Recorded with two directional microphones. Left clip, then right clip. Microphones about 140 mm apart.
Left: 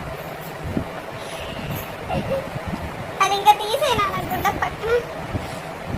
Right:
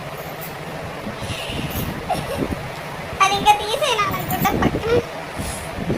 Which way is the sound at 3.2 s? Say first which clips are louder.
Right 1 dB; 5° left (ahead or behind).